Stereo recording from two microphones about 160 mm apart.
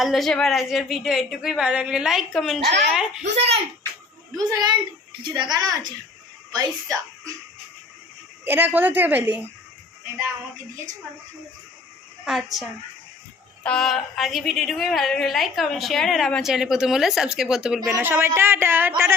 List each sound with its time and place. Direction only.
0.0 s a woman's voice: centre (ahead or behind)
3.2 s speech: 40° right (ahead or behind)
5.2 s speech: 30° right (ahead or behind)
8.4 s a woman's voice: 10° right (ahead or behind)
12.2 s a woman's voice: centre (ahead or behind)
13.7 s a woman's voice: centre (ahead or behind); by 19.1 s 15° right (ahead or behind)